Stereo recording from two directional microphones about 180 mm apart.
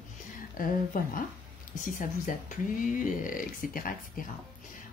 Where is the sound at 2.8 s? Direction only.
45° left (ahead or behind).